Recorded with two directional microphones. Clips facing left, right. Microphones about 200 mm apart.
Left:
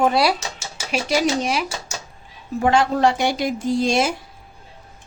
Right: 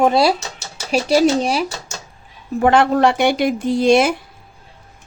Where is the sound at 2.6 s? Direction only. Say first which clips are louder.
Right 4 dB; 60° right (ahead or behind).